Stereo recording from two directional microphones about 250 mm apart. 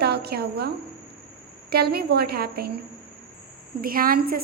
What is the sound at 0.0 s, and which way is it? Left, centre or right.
Speech, right.